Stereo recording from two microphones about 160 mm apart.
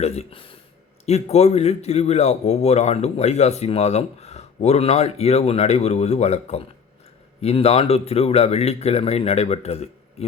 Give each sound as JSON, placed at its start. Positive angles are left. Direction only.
{"t": 0.0, "sound": "a man's voice", "side_deg": 40}